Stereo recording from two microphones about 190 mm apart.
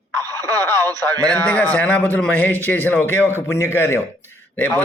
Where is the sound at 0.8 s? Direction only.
20° right (ahead or behind).